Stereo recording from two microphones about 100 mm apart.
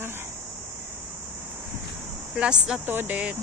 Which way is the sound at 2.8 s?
20° right (ahead or behind).